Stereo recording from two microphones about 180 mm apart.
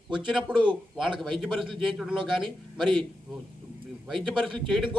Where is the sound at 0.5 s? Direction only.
25° right (ahead or behind).